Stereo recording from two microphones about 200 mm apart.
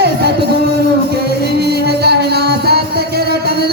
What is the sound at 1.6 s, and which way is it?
Music, 55° right (ahead or behind).